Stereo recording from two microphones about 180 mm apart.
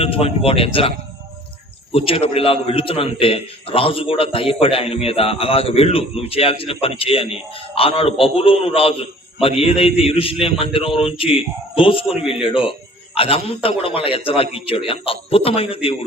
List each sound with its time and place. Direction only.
0.0 s a man's voice: 35° left (ahead or behind)